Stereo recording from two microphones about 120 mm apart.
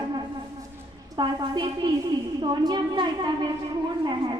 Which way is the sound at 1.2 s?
40° right (ahead or behind).